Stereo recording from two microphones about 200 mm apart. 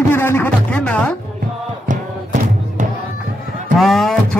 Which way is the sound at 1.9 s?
40° right (ahead or behind).